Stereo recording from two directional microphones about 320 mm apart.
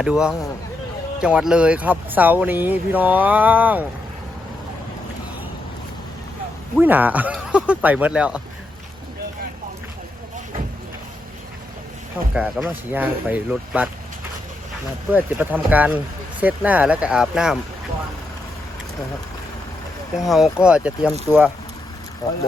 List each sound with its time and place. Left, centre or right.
0.0 s speech: centre
6.7 s speech: centre
12.3 s speech: centre
15.1 s speech: centre
20.1 s speech: centre
22.2 s speech: centre